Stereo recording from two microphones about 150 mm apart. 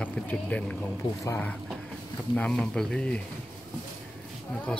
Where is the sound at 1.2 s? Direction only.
15° left (ahead or behind).